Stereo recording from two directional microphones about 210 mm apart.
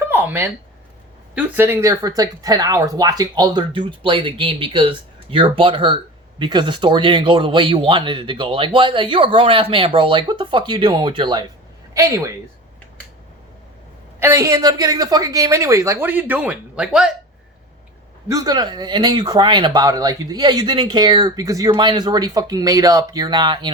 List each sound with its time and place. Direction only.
0.0 s a sound: 10° right (ahead or behind)
1.4 s a woman's voice: 10° right (ahead or behind)
14.2 s a woman's voice: 15° right (ahead or behind)
18.3 s speech: 15° right (ahead or behind)